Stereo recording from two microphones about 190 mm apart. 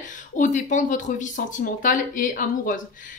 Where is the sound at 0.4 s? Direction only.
40° left (ahead or behind).